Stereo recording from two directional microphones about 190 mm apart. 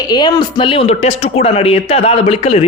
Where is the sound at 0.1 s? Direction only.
20° left (ahead or behind).